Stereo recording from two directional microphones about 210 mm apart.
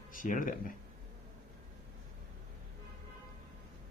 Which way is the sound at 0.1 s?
40° left (ahead or behind).